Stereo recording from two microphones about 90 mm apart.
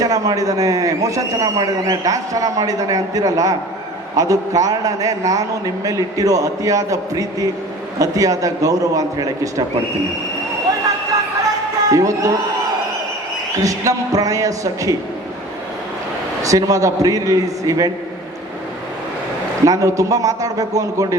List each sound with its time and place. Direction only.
0.0 s a man's voice: 40° right (ahead or behind)
11.9 s a man's voice: 40° right (ahead or behind)
13.6 s a man's voice: 40° right (ahead or behind)
16.4 s a man's voice: 40° right (ahead or behind)
19.6 s a man's voice: 40° right (ahead or behind)